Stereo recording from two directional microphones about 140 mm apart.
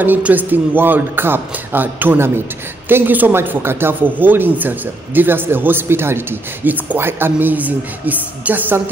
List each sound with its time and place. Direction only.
0.0 s speech: 10° right (ahead or behind)